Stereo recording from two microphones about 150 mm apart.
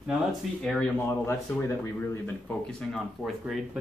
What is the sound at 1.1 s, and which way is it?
Speech, 15° left (ahead or behind).